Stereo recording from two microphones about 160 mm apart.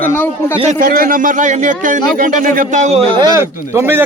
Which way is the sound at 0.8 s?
65° right (ahead or behind).